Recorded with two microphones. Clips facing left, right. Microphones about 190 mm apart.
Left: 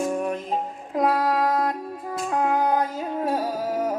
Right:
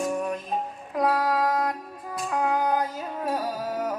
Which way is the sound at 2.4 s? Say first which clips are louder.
Left 2 dB; 25° left (ahead or behind).